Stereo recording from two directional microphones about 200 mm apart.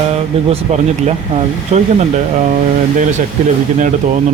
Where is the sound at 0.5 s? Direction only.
35° right (ahead or behind).